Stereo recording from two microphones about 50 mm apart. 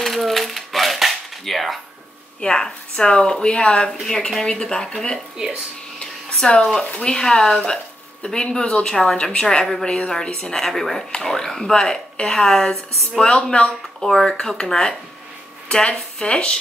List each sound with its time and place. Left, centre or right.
0.0 s typewriter: centre
2.4 s a woman's voice: centre
4.0 s a woman's voice: centre
5.9 s a sound: centre
7.0 s a woman's voice: centre
10.6 s a woman's voice: centre; by 13.7 s left
14.0 s a woman's voice: centre